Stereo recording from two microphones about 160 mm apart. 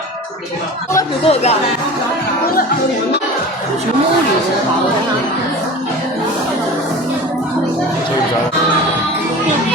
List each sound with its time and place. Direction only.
1.2 s speech: 40° left (ahead or behind)